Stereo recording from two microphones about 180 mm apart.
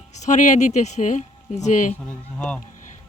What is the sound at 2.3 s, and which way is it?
Speech, 5° left (ahead or behind).